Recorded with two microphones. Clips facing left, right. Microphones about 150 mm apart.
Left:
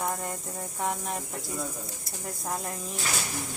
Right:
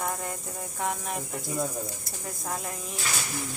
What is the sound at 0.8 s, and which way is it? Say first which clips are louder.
Speech: even; centre (ahead or behind).